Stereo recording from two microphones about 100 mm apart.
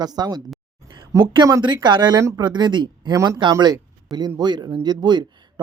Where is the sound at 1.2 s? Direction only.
55° right (ahead or behind).